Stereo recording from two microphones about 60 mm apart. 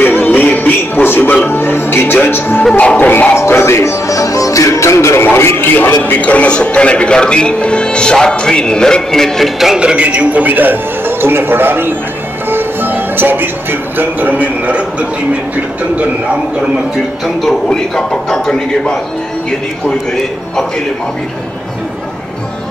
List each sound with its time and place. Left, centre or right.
0.0 s music: left
2.2 s speech: left
2.8 s music: left
3.1 s speech: left
3.3 s music: left
5.3 s a sound: left
6.0 s a man's voice: left; by 9.8 s centre
9.8 s a man's voice: centre
17.6 s a man's voice: centre